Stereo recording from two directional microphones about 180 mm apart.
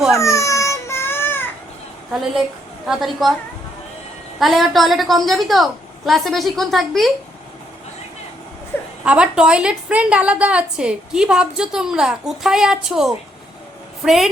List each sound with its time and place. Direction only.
0.2 s baby cry: 15° left (ahead or behind)
2.8 s a woman's voice: centre (ahead or behind)
4.4 s a woman's voice: centre (ahead or behind)
9.0 s a woman's voice: 5° right (ahead or behind)